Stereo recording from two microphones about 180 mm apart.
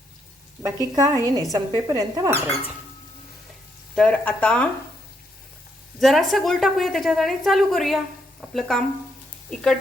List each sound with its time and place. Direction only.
0.6 s a woman's voice: 20° right (ahead or behind)
3.9 s speech: 5° left (ahead or behind)
6.0 s a woman's voice: centre (ahead or behind)